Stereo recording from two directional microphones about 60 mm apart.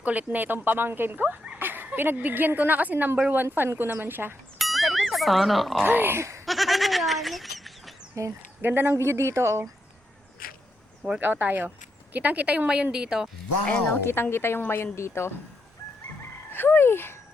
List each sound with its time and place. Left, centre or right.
0.0 s speech: right
4.5 s pig: centre
5.8 s speech: right
6.1 s speech: right
6.4 s fowl: centre
8.1 s speech: right
8.6 s speech: right
11.2 s a woman's voice: right; by 13.3 s centre
13.9 s a woman's voice: left
16.5 s speech: left